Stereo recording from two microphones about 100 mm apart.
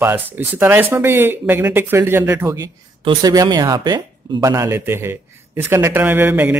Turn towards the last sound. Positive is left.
turn(degrees=-20)  # may be behind; listen again after turning